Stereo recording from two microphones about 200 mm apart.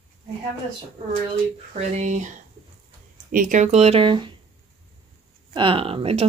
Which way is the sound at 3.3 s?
40° right (ahead or behind).